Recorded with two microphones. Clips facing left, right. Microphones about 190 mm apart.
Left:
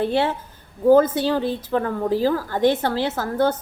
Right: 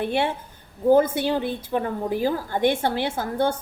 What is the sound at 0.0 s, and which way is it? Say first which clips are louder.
Speech: left 3 dB; 15° right (ahead or behind).